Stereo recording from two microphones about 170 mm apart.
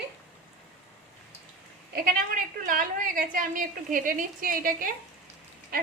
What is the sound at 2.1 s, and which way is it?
A woman's voice, 55° right (ahead or behind).